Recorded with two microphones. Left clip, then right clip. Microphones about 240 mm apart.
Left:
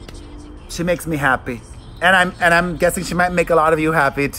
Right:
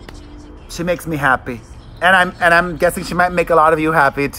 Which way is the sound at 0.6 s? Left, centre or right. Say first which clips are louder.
Even; centre.